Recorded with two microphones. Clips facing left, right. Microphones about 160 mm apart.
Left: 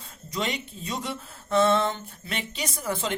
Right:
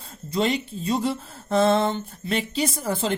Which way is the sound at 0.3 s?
30° right (ahead or behind).